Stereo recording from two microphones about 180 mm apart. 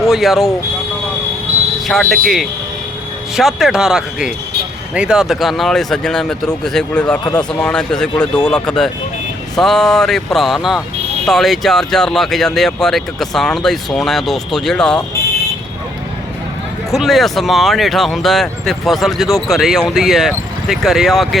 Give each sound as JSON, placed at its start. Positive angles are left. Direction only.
{"t": 0.0, "sound": "speech", "side_deg": 0}
{"t": 1.9, "sound": "speech", "side_deg": 0}
{"t": 16.9, "sound": "speech", "side_deg": 0}